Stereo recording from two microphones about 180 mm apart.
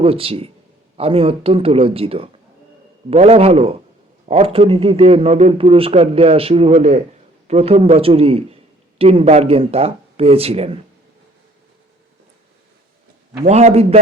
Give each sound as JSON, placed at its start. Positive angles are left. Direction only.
{"t": 0.0, "sound": "a man's voice", "side_deg": -30}
{"t": 13.4, "sound": "a man's voice", "side_deg": -40}